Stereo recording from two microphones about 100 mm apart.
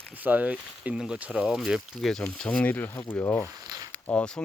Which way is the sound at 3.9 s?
10° left (ahead or behind).